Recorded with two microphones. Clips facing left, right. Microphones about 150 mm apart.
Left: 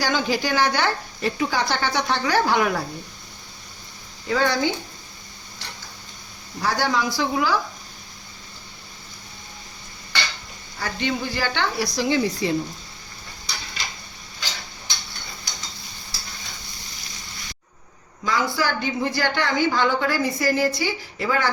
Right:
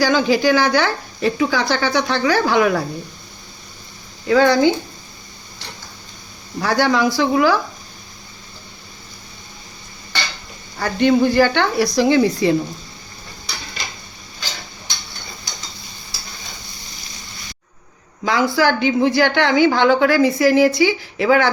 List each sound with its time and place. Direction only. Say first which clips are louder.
0.0 s speech: right 8 dB; 90° right
4.3 s speech: right 8 dB; 80° right
6.6 s a woman's voice: right 6 dB; 70° right (ahead or behind)
10.8 s speech: right 11 dB; 55° right (ahead or behind); by 12.5 s 70° right (ahead or behind)
18.3 s a woman's voice: right 7 dB; 75° right (ahead or behind)